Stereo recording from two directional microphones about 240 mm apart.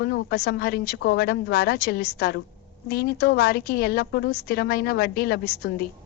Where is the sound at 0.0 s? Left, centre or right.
Left.